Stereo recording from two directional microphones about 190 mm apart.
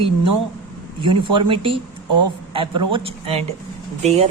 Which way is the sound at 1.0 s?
25° right (ahead or behind).